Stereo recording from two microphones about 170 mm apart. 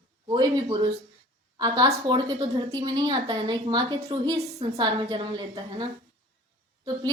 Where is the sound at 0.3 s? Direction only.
25° right (ahead or behind).